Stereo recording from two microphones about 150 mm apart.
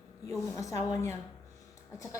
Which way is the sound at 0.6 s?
20° left (ahead or behind).